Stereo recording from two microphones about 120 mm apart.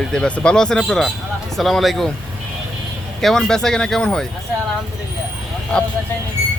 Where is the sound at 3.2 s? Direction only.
5° left (ahead or behind).